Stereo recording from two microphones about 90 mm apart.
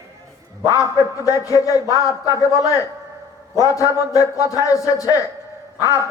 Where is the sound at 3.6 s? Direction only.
35° left (ahead or behind).